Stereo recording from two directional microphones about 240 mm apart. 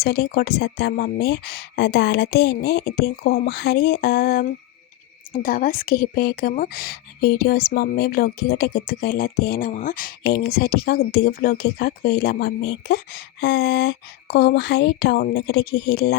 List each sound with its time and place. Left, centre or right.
0.0 s speech: left